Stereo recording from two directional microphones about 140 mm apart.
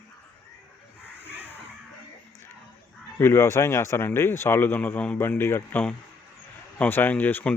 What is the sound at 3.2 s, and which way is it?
Speech, 20° left (ahead or behind).